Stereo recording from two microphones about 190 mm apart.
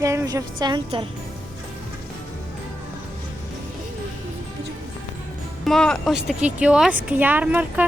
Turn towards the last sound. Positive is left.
turn(degrees=-10)  # may be behind; listen again after turning